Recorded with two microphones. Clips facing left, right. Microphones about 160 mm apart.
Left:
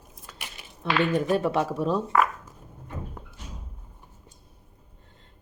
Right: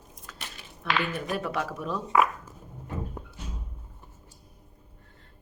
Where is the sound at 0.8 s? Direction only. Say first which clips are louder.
Left 6 dB; 25° left (ahead or behind).